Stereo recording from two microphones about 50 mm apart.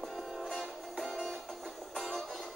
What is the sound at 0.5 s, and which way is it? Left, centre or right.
Music, centre.